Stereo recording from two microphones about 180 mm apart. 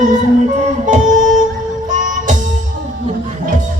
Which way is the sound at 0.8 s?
45° right (ahead or behind).